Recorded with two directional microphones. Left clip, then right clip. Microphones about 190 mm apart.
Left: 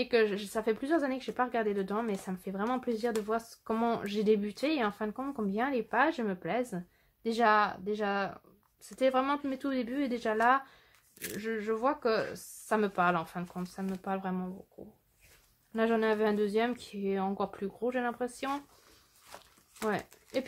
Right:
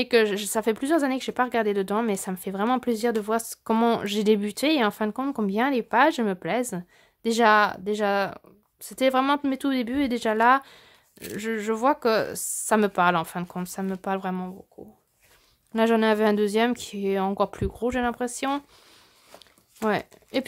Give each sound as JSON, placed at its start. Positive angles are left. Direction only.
{"t": 0.0, "sound": "speech", "side_deg": -35}
{"t": 15.7, "sound": "speech", "side_deg": -40}
{"t": 19.8, "sound": "speech", "side_deg": -35}